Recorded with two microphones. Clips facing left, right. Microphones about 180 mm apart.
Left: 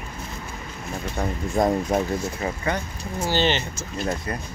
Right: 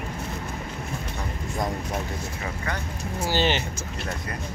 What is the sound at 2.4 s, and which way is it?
Speech, 20° left (ahead or behind).